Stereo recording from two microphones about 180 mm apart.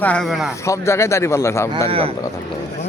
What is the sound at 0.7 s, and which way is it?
A man's voice, 15° left (ahead or behind).